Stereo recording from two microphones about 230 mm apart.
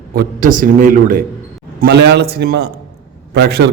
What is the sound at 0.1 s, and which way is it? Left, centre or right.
A man's voice, right.